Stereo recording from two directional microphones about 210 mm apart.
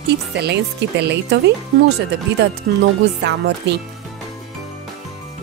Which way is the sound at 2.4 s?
55° right (ahead or behind).